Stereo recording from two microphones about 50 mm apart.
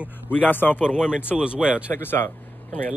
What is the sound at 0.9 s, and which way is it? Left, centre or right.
Speech, centre.